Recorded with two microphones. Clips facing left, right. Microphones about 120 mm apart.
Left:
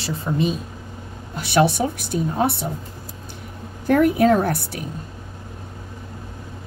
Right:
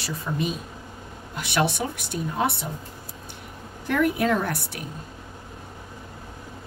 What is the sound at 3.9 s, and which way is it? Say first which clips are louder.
Speech: left 7 dB; 40° left (ahead or behind).